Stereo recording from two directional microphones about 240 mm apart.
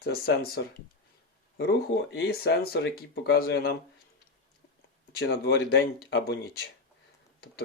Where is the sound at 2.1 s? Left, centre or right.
Left.